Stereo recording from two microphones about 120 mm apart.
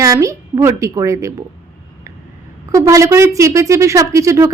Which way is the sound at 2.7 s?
25° right (ahead or behind).